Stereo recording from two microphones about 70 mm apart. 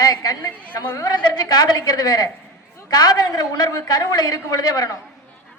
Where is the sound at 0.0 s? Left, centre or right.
Left.